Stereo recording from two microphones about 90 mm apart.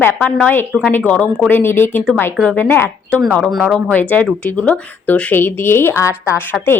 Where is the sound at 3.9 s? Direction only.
15° left (ahead or behind); by 6.4 s 35° left (ahead or behind).